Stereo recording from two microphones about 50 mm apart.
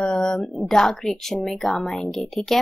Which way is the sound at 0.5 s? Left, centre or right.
Centre.